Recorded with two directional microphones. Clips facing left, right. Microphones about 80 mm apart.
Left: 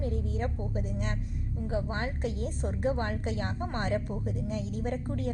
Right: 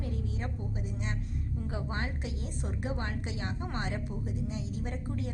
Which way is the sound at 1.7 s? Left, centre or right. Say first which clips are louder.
Left 5 dB; left.